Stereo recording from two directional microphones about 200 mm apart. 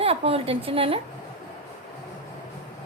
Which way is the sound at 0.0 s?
30° right (ahead or behind).